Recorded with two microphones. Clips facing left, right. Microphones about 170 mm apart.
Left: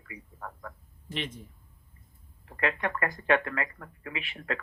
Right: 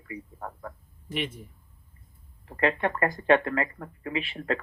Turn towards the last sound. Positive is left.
turn(degrees=-30)  # may be behind; listen again after turning